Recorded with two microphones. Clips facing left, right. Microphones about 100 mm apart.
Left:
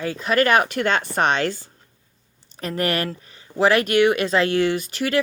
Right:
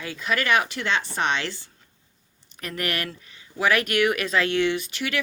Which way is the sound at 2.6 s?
30° left (ahead or behind).